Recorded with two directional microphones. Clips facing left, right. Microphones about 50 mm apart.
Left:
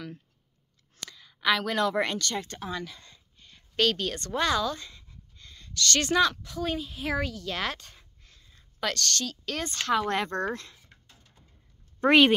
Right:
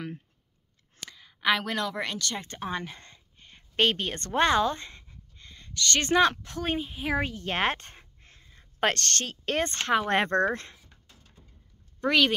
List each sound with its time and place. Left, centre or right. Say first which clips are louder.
0.9 s a sound: left 1 dB; right
1.7 s speech: left 4 dB; centre
2.3 s speech: left 1 dB; right
2.7 s a woman's voice: right 1 dB; right
5.0 s a woman's voice: right 1 dB; right
7.2 s a sound: right 6 dB; right
8.7 s speech: right 3 dB; right
12.0 s speech: left 4 dB; left